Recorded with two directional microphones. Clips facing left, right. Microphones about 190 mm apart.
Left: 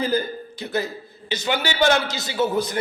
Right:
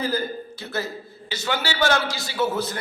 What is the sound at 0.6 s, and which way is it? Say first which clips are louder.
A man's voice: left 5 dB; 15° left (ahead or behind).